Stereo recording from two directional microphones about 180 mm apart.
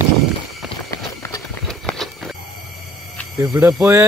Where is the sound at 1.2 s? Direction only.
15° left (ahead or behind).